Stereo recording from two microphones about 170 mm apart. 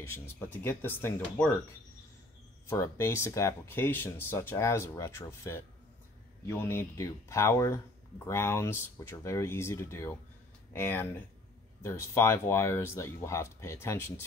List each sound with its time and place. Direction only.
0.5 s speech: 10° left (ahead or behind)
2.7 s speech: 15° left (ahead or behind)